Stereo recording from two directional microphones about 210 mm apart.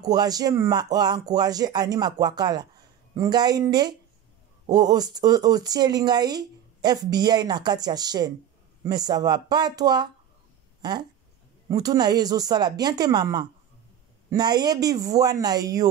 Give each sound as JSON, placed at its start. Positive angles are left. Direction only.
{"t": 0.0, "sound": "speech", "side_deg": -20}